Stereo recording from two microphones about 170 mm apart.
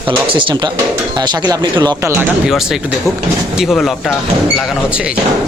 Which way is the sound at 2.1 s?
5° right (ahead or behind).